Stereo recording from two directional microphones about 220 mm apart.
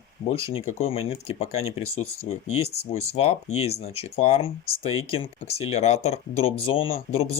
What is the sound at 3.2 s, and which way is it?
Speech, 30° left (ahead or behind).